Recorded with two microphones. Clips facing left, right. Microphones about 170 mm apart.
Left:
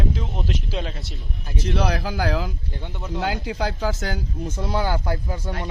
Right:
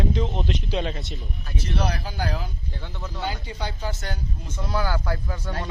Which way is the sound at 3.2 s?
90° left.